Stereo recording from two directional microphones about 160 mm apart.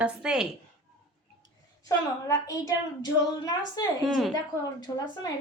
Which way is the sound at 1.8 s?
20° left (ahead or behind).